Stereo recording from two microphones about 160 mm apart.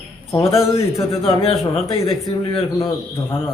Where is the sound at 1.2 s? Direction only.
35° left (ahead or behind).